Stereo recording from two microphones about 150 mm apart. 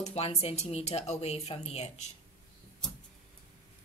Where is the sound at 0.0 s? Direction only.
45° left (ahead or behind).